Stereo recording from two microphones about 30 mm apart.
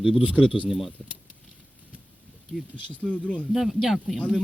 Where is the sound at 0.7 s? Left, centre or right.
Centre.